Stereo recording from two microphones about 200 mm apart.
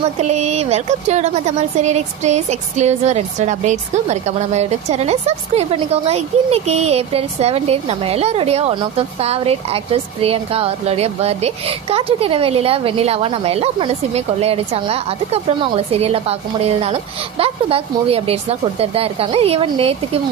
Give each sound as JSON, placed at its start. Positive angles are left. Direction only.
{"t": 0.2, "sound": "a woman's voice", "side_deg": -35}